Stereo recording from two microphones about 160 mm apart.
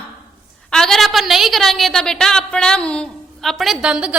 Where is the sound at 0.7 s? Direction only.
5° left (ahead or behind).